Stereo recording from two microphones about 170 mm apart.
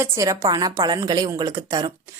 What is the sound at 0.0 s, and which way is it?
Speech, 20° right (ahead or behind).